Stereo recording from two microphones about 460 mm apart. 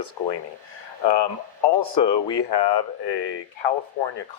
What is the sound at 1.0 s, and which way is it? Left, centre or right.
Speech, left.